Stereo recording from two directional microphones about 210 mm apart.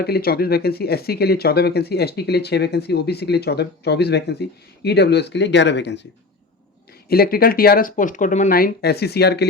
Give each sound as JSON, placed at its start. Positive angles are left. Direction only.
{"t": 0.0, "sound": "speech", "side_deg": 45}
{"t": 7.1, "sound": "speech", "side_deg": 45}